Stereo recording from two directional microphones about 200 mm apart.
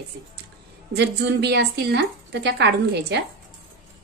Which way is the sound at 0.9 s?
60° right (ahead or behind).